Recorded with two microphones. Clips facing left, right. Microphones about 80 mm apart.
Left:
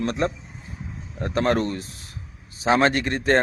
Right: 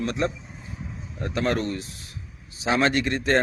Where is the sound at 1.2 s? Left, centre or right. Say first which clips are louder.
Left 3 dB; left.